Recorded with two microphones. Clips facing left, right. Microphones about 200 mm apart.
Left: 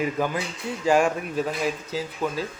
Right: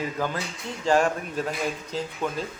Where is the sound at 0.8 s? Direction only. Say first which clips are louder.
Left 1 dB; 10° left (ahead or behind).